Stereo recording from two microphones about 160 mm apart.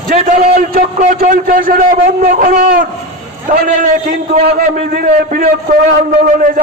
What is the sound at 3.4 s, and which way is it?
Speech, 55° right (ahead or behind).